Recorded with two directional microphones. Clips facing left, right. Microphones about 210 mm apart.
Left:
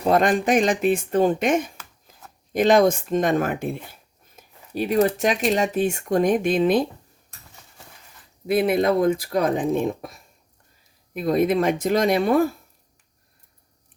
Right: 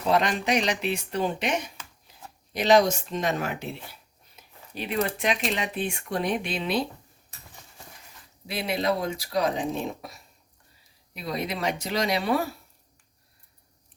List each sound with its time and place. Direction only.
0.0 s speech: 50° left (ahead or behind)
2.1 s shuffling cards: 50° left (ahead or behind)
2.5 s speech: 50° left (ahead or behind)
8.4 s speech: 50° left (ahead or behind)